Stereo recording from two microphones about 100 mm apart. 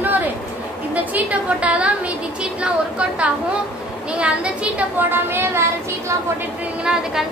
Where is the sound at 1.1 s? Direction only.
15° right (ahead or behind).